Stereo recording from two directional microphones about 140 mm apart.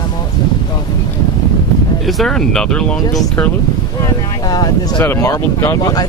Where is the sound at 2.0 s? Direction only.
Centre (ahead or behind).